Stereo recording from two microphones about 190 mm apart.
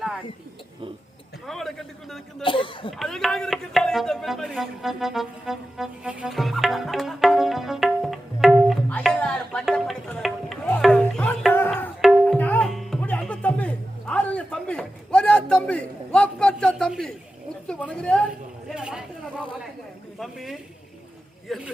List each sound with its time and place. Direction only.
1.5 s a sound: centre (ahead or behind)
2.4 s a man's voice: 25° left (ahead or behind)
3.0 s music: centre (ahead or behind)
11.5 s tabla: 10° left (ahead or behind)
17.7 s a woman's voice: 5° left (ahead or behind)
18.7 s a sound: 5° right (ahead or behind)
20.1 s speech: centre (ahead or behind)